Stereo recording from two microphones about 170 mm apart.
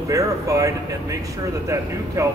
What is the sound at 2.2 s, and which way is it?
Speech, 15° right (ahead or behind).